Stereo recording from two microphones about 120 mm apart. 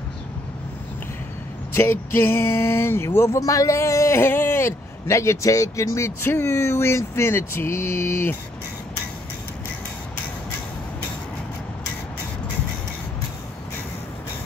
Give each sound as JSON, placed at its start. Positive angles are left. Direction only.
{"t": 1.8, "sound": "speech", "side_deg": 20}